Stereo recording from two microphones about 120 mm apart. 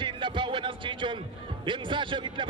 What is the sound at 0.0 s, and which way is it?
Music, 45° right (ahead or behind).